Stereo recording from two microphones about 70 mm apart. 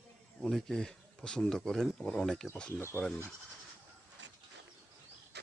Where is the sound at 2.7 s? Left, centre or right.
Left.